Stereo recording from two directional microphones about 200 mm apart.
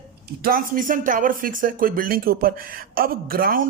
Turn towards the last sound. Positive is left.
turn(degrees=-45)  # may be behind; listen again after turning